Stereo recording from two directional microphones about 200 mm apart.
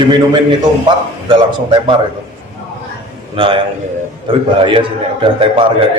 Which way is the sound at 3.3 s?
25° right (ahead or behind).